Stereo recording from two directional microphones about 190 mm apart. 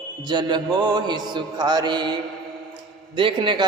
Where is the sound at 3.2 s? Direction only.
25° right (ahead or behind).